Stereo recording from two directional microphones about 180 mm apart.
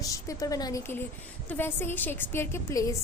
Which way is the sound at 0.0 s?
20° left (ahead or behind).